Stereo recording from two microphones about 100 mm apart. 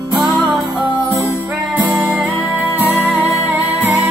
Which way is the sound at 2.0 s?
10° right (ahead or behind).